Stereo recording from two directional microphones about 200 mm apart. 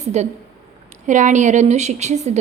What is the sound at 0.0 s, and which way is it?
A woman's voice, 35° right (ahead or behind).